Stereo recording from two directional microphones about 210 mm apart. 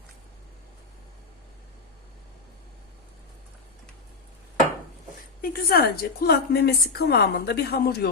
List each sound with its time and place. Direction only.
5.4 s a woman's voice: 45° left (ahead or behind)